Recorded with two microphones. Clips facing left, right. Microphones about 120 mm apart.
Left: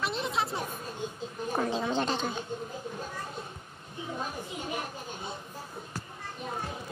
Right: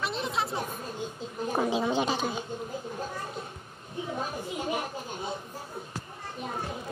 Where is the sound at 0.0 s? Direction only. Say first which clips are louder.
Even; centre (ahead or behind).